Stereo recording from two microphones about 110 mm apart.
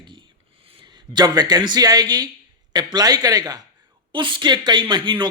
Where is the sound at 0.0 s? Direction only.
45° right (ahead or behind).